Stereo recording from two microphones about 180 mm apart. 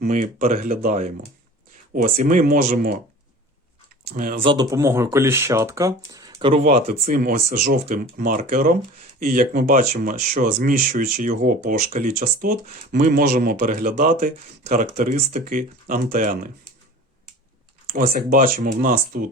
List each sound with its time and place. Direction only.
0.0 s speech: 50° right (ahead or behind)
4.0 s speech: 50° right (ahead or behind)
4.4 s speech: 20° right (ahead or behind)
6.5 s speech: 40° right (ahead or behind)
7.1 s speech: 55° right (ahead or behind)
18.1 s speech: 50° right (ahead or behind)